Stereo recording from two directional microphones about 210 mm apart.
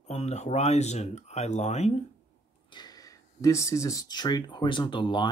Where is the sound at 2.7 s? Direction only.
20° left (ahead or behind).